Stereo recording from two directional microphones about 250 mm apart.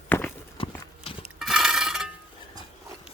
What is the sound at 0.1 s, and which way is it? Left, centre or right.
Walk, centre.